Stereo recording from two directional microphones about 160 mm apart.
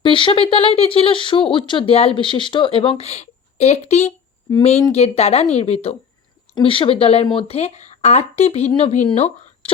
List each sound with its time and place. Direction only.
0.0 s speech: 30° left (ahead or behind)